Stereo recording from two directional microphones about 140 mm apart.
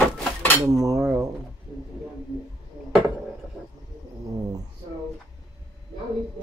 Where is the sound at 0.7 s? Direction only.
25° right (ahead or behind).